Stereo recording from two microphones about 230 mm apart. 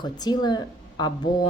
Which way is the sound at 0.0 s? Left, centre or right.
Centre.